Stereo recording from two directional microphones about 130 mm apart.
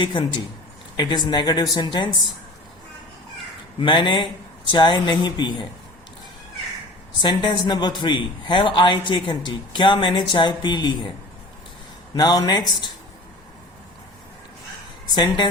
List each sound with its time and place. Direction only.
0.0 s a man's voice: 40° left (ahead or behind)
3.8 s a man's voice: 40° left (ahead or behind)
7.2 s a man's voice: 35° left (ahead or behind)
12.1 s a man's voice: 30° left (ahead or behind)
15.1 s a man's voice: 35° left (ahead or behind)